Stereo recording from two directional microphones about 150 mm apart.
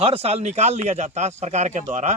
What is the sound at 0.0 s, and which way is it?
Speech, 40° right (ahead or behind).